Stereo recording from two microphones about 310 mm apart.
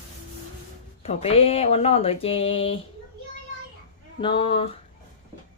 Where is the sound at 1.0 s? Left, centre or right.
Centre.